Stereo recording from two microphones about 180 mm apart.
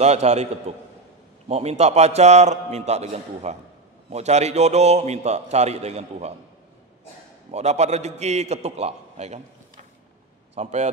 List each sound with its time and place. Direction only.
0.0 s a man's voice: 35° right (ahead or behind)
7.5 s a man's voice: 40° right (ahead or behind)
10.5 s speech: 40° right (ahead or behind)